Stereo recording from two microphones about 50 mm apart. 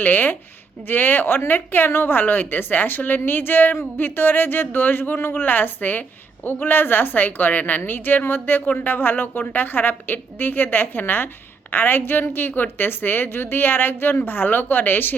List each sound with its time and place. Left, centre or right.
0.0 s a woman's voice: left